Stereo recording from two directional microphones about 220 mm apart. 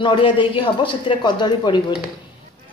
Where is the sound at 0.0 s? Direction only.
20° left (ahead or behind).